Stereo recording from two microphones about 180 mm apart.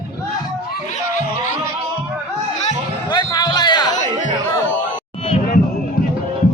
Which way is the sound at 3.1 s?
20° left (ahead or behind).